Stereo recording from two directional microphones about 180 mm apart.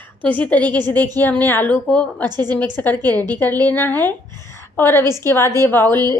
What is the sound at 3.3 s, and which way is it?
A woman's voice, 10° left (ahead or behind).